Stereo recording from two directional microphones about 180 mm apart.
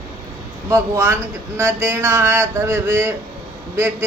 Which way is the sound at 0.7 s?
15° right (ahead or behind).